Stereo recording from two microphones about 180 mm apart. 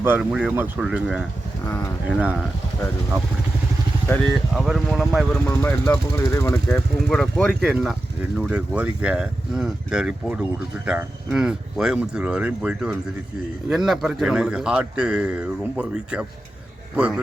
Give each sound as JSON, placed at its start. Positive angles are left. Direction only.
{"t": 0.0, "sound": "speech", "side_deg": -10}
{"t": 1.6, "sound": "speech", "side_deg": 15}
{"t": 2.0, "sound": "speech", "side_deg": -5}
{"t": 4.5, "sound": "a man's voice", "side_deg": 0}
{"t": 5.5, "sound": "speech", "side_deg": 15}
{"t": 6.7, "sound": "a man's voice", "side_deg": 5}